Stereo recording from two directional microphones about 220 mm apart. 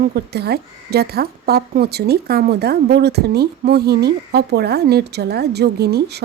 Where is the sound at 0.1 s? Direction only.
45° right (ahead or behind).